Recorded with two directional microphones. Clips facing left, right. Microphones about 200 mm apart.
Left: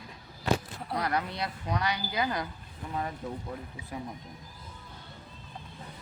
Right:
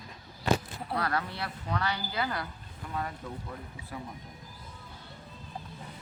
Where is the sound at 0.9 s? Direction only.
15° left (ahead or behind).